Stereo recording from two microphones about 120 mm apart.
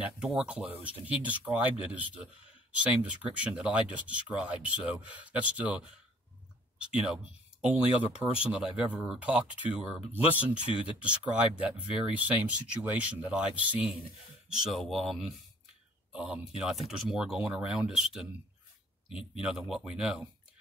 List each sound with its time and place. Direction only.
0.0 s speech: 5° right (ahead or behind)
14.6 s speech: centre (ahead or behind)
19.0 s speech: 45° left (ahead or behind)
19.7 s speech: 5° right (ahead or behind)